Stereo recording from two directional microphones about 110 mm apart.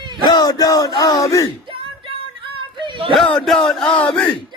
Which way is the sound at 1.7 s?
55° right (ahead or behind).